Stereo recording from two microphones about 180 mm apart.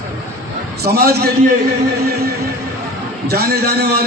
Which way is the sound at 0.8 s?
60° right (ahead or behind).